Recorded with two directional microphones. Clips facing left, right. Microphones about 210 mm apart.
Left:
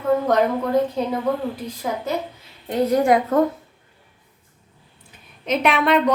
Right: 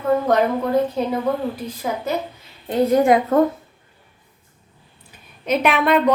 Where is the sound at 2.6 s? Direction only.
25° right (ahead or behind).